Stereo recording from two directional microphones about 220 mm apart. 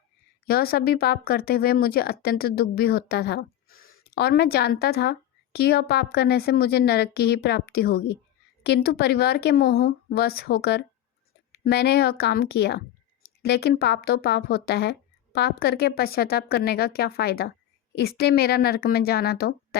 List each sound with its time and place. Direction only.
0.4 s speech: 45° left (ahead or behind)